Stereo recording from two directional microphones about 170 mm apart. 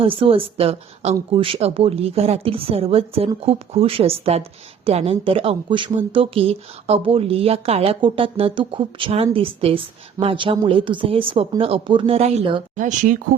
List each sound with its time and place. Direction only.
0.0 s speech: 30° right (ahead or behind)
12.7 s speech: 50° right (ahead or behind)